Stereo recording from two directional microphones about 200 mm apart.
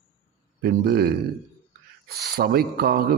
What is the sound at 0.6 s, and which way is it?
A man's voice, 50° right (ahead or behind).